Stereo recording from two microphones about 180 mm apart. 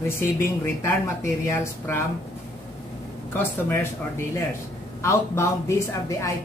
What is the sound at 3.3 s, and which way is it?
Speech, 10° left (ahead or behind).